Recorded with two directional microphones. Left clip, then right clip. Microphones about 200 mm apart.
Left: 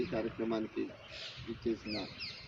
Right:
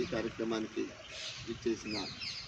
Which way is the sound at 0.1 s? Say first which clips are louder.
Even; 40° left (ahead or behind).